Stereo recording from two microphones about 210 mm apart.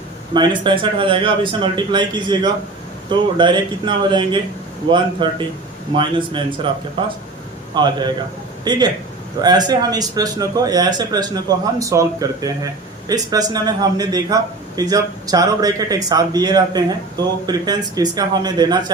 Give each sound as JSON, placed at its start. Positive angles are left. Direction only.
{"t": 0.3, "sound": "a man's voice", "side_deg": -20}
{"t": 7.7, "sound": "a man's voice", "side_deg": -20}